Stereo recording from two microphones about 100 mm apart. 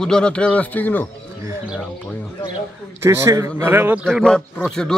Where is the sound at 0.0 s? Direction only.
10° left (ahead or behind).